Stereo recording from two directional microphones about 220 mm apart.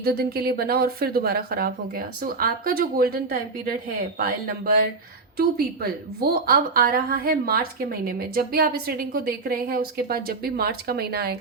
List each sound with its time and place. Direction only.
0.0 s a woman's voice: 45° right (ahead or behind)